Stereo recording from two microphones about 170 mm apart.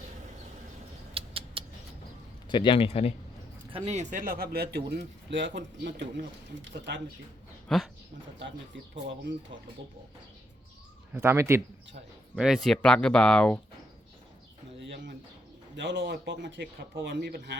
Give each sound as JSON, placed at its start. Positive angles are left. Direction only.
{"t": 1.1, "sound": "a sound", "side_deg": -35}
{"t": 2.5, "sound": "speech", "side_deg": 30}
{"t": 3.7, "sound": "a man's voice", "side_deg": -35}
{"t": 7.7, "sound": "speech", "side_deg": 5}
{"t": 8.4, "sound": "a man's voice", "side_deg": -90}
{"t": 11.1, "sound": "speech", "side_deg": -15}
{"t": 12.4, "sound": "speech", "side_deg": 0}
{"t": 15.7, "sound": "a man's voice", "side_deg": -90}